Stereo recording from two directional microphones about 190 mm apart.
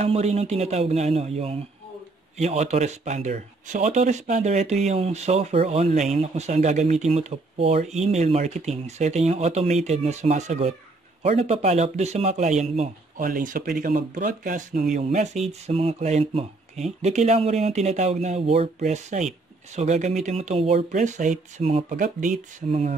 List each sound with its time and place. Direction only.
0.0 s speech: 35° right (ahead or behind)
22.7 s speech: 35° right (ahead or behind)